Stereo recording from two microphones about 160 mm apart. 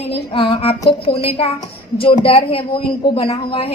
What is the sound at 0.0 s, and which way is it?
A woman's voice, 35° left (ahead or behind).